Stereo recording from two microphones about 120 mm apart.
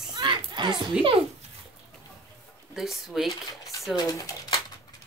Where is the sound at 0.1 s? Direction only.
40° right (ahead or behind).